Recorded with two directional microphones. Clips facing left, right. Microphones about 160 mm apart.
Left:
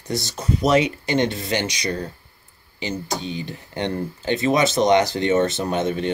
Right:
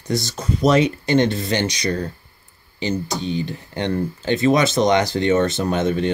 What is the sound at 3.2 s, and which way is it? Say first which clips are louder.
Speech: right 5 dB; 10° left (ahead or behind).